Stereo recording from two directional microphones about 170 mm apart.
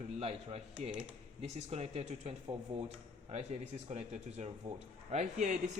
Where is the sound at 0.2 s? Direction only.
35° right (ahead or behind).